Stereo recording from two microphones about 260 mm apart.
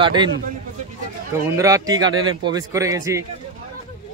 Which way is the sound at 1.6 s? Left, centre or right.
Centre.